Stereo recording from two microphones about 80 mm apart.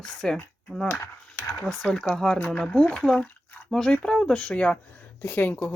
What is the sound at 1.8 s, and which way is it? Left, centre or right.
Speech, centre.